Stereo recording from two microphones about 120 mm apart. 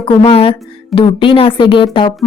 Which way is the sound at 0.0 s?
50° left (ahead or behind).